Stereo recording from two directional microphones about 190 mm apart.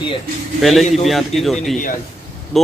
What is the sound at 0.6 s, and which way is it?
A man's voice, centre (ahead or behind).